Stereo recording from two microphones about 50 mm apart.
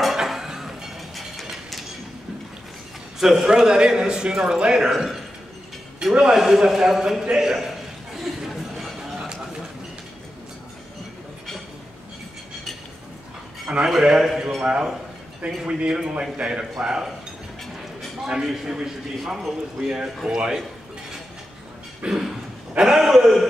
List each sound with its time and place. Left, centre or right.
0.0 s a sound: centre
3.2 s a man's voice: centre
4.9 s a man's voice: centre
8.2 s chatter: centre
13.8 s a man's voice: centre
14.6 s a man's voice: centre
18.2 s a man's voice: centre
22.0 s a man's voice: centre